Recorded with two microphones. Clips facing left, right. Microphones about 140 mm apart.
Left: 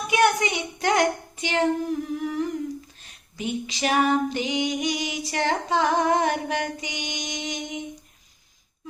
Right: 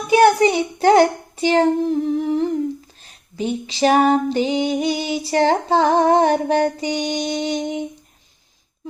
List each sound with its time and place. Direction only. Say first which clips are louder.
0.1 s a child's voice: right 8 dB; 30° right (ahead or behind)
3.0 s female singing: right 7 dB; 30° right (ahead or behind)